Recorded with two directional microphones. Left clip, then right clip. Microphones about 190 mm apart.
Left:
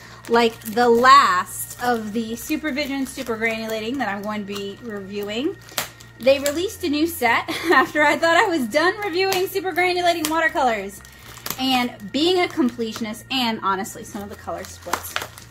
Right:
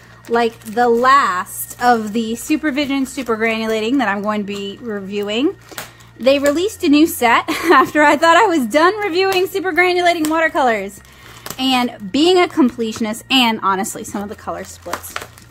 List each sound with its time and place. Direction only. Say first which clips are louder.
0.3 s speech: right 1 dB; 15° right (ahead or behind)
1.8 s a woman's voice: right 8 dB; 50° right (ahead or behind)
13.9 s speech: right 7 dB; 55° right (ahead or behind)